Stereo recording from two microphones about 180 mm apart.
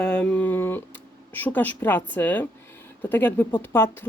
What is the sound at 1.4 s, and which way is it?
A woman's voice, 10° left (ahead or behind).